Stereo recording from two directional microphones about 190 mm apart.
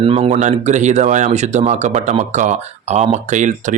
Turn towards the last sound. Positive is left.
turn(degrees=-40)  # may be behind; listen again after turning